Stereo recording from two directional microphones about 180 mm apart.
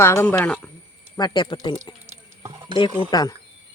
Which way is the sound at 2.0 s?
20° right (ahead or behind).